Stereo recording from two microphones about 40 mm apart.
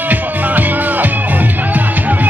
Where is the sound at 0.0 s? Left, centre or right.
Right.